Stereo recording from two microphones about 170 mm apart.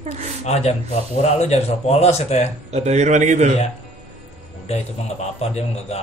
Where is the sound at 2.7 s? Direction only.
40° right (ahead or behind).